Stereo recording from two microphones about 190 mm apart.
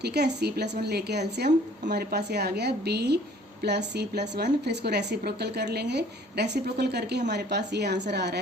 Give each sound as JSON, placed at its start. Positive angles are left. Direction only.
{"t": 0.0, "sound": "a woman's voice", "side_deg": -60}